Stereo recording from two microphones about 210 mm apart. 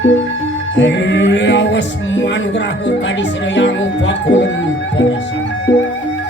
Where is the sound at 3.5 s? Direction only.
60° left (ahead or behind).